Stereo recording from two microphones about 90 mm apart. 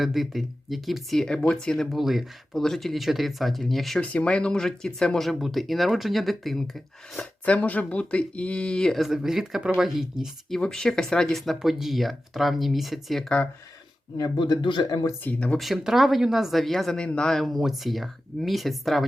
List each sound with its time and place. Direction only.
0.0 s speech: centre (ahead or behind)
4.0 s speech: 15° left (ahead or behind)
7.4 s speech: 15° left (ahead or behind); by 10.6 s 5° right (ahead or behind)
10.6 s speech: 10° left (ahead or behind)
14.2 s speech: 50° left (ahead or behind)
15.2 s speech: 15° left (ahead or behind)
15.5 s speech: centre (ahead or behind)